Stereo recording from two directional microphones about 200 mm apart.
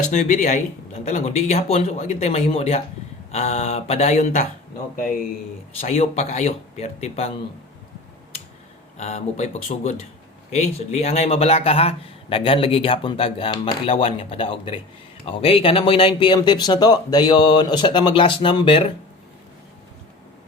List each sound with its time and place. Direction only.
0.0 s speech: 40° left (ahead or behind)
5.8 s speech: 35° left (ahead or behind)
9.0 s speech: 35° left (ahead or behind)